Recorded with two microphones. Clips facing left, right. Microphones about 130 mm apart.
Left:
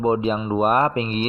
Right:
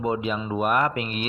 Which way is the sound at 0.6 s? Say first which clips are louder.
Left 4 dB; 30° left (ahead or behind).